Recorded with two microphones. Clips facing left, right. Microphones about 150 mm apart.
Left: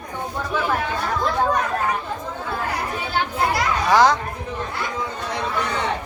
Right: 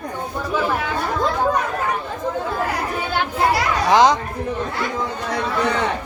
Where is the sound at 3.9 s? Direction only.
20° right (ahead or behind).